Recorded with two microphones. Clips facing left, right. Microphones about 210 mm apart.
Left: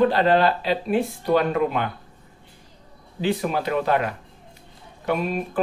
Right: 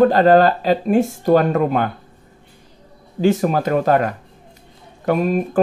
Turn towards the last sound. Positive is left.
turn(degrees=-45)  # may be behind; listen again after turning